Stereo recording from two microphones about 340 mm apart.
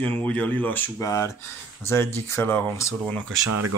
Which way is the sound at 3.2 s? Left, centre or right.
Right.